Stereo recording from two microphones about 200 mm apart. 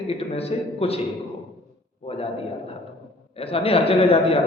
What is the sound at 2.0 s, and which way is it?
A man's voice, 30° left (ahead or behind).